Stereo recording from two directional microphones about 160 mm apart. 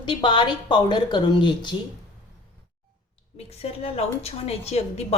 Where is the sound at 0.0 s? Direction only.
30° left (ahead or behind).